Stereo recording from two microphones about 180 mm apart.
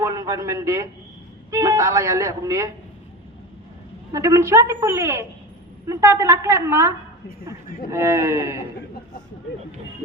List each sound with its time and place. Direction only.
0.0 s a man's voice: 20° right (ahead or behind)
4.1 s a man's voice: 15° right (ahead or behind)